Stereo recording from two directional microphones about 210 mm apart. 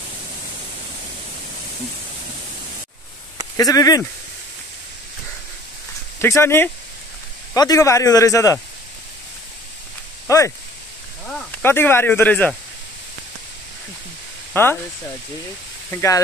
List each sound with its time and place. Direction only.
3.5 s a man's voice: 15° left (ahead or behind)
6.2 s a man's voice: 10° left (ahead or behind)
10.2 s speech: 15° left (ahead or behind)
14.5 s speech: 10° left (ahead or behind)
15.9 s a man's voice: 15° left (ahead or behind)